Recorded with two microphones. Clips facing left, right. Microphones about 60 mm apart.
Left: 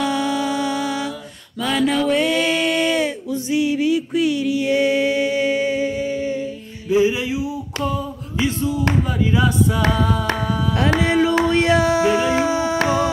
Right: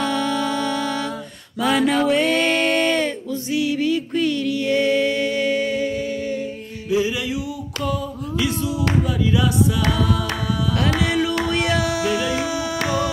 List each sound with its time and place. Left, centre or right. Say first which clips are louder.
0.0 s music: left 1 dB; centre
1.6 s mantra: right 1 dB; centre
2.4 s a sound: even; centre
3.4 s music: left 2 dB; left